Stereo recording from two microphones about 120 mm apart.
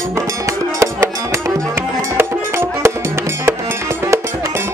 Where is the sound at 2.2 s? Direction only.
20° right (ahead or behind).